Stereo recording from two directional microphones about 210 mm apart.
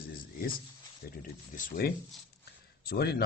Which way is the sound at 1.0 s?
45° left (ahead or behind).